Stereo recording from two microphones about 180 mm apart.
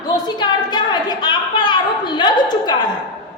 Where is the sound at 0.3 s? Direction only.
25° left (ahead or behind).